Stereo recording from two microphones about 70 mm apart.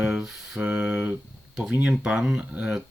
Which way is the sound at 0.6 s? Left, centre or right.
Centre.